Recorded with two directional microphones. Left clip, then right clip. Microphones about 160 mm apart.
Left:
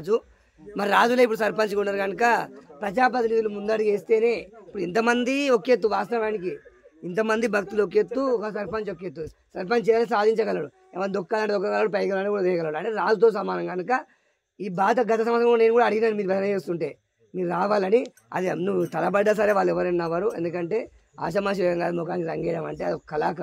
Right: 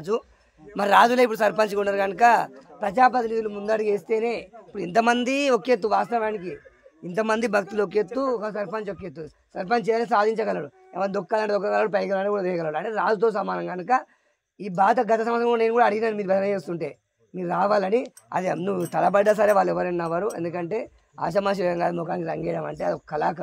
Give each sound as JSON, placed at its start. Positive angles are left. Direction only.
{"t": 0.1, "sound": "a man's voice", "side_deg": -35}